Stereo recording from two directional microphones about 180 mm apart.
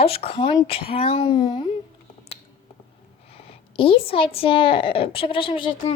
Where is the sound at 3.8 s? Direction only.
30° left (ahead or behind).